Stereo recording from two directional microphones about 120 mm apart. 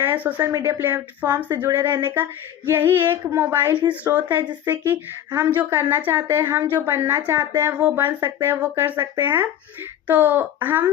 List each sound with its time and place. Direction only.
0.0 s a woman's voice: 15° right (ahead or behind)